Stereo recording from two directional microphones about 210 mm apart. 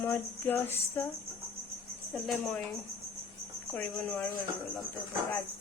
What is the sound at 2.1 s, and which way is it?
Speech, 10° left (ahead or behind).